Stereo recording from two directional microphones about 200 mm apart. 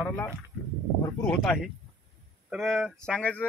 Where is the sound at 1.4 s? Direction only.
Centre (ahead or behind).